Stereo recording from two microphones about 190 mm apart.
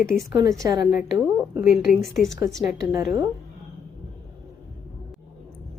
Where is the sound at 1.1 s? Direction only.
15° right (ahead or behind).